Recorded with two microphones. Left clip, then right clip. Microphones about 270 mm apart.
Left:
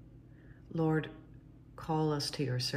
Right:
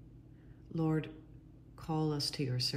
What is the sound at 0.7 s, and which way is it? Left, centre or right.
Speech, centre.